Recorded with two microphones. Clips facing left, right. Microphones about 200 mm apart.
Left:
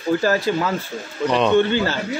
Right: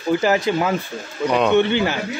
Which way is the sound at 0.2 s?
20° right (ahead or behind).